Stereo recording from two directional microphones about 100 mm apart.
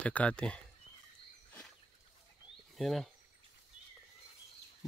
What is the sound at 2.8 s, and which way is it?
Speech, centre (ahead or behind).